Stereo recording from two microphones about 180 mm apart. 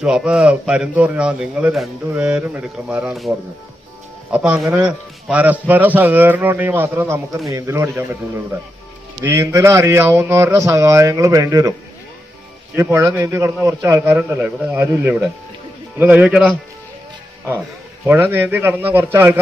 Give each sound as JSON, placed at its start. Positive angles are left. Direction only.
{"t": 0.0, "sound": "a man's voice", "side_deg": -5}
{"t": 4.3, "sound": "a man's voice", "side_deg": -5}
{"t": 9.2, "sound": "a man's voice", "side_deg": -15}
{"t": 12.7, "sound": "a man's voice", "side_deg": -15}
{"t": 18.0, "sound": "a man's voice", "side_deg": -10}